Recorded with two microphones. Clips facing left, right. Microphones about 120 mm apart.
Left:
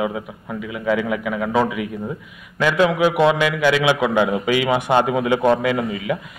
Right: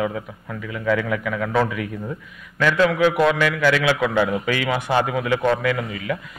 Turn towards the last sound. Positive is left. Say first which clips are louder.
# left 3 dB
turn(degrees=20)  # may be behind; listen again after turning